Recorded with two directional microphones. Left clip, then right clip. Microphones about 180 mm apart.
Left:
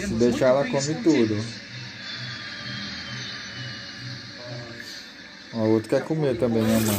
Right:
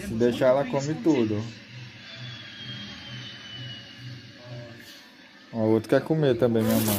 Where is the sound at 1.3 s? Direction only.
45° left (ahead or behind).